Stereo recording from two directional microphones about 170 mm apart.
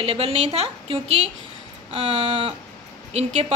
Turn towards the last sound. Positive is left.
turn(degrees=-35)  # may be behind; listen again after turning